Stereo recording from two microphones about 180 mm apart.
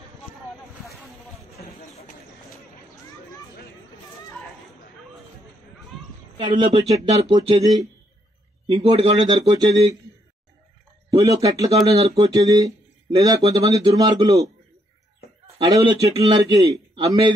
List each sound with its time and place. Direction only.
6.3 s speech: 30° right (ahead or behind)
8.6 s speech: 35° right (ahead or behind)
9.6 s speech: 20° right (ahead or behind)
11.1 s speech: 20° right (ahead or behind)
11.9 s speech: 35° right (ahead or behind)
12.3 s speech: 20° right (ahead or behind)
15.6 s speech: 25° right (ahead or behind)